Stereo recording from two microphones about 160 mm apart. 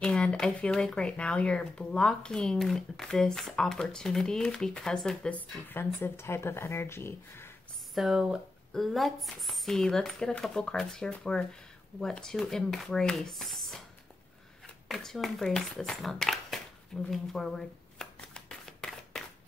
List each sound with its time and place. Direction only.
0.0 s speech: 5° left (ahead or behind)
7.9 s speech: centre (ahead or behind)
14.9 s a sound: centre (ahead or behind)